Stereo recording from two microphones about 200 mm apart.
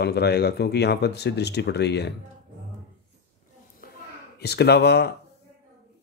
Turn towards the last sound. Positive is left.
turn(degrees=55)  # may be behind; listen again after turning